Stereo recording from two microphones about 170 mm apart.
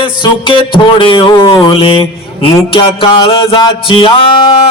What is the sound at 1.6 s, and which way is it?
Speech, 30° left (ahead or behind).